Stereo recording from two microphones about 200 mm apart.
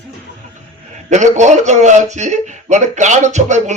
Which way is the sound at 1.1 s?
35° right (ahead or behind).